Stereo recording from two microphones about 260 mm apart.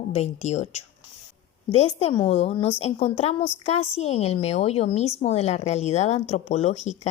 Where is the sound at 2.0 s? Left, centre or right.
Left.